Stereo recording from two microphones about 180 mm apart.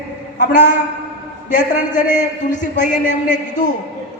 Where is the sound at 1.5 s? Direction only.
45° left (ahead or behind).